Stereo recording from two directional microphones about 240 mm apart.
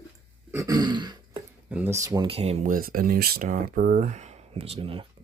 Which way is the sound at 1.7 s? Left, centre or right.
Centre.